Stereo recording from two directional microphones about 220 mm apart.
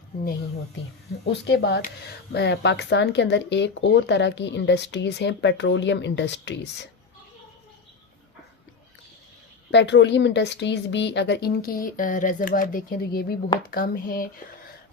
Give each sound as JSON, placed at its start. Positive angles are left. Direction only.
{"t": 1.2, "sound": "speech", "side_deg": 50}
{"t": 9.7, "sound": "speech", "side_deg": 55}